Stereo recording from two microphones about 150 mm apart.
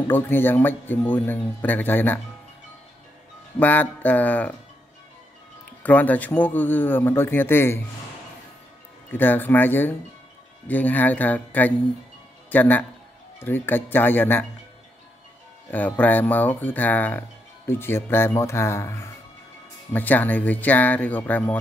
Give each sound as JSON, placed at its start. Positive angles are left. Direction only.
{"t": 0.1, "sound": "speech", "side_deg": 15}
{"t": 3.5, "sound": "speech", "side_deg": 10}
{"t": 5.8, "sound": "speech", "side_deg": 10}
{"t": 9.1, "sound": "a man's voice", "side_deg": 15}
{"t": 15.7, "sound": "speech", "side_deg": 10}